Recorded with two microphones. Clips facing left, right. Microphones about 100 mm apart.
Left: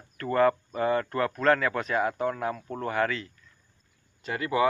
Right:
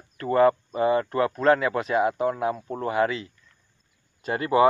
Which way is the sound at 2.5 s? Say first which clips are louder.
Right 4 dB; 20° right (ahead or behind).